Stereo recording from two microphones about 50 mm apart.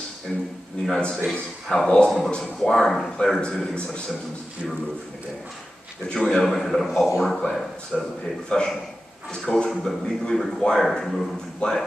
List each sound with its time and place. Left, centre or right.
0.3 s a man's voice: centre
6.1 s a man's voice: centre
11.6 s speech: left